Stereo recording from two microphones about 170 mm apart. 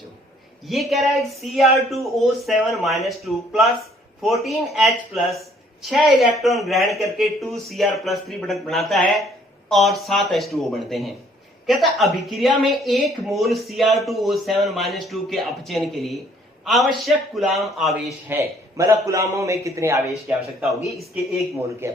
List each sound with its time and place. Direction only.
0.7 s speech: centre (ahead or behind)
18.3 s a man's voice: 15° right (ahead or behind)
20.7 s speech: centre (ahead or behind)
21.8 s speech: 15° right (ahead or behind)